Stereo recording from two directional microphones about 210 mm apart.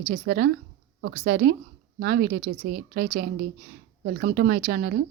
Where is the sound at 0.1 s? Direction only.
45° right (ahead or behind).